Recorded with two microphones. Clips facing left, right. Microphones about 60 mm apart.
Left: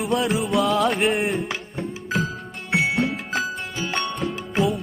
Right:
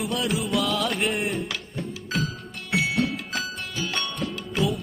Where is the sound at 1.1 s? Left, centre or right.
Left.